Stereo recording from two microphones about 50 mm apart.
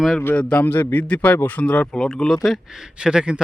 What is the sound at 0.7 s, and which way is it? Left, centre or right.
Speech, left.